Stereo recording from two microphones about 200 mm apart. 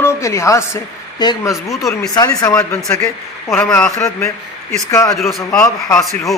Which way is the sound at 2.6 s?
5° left (ahead or behind).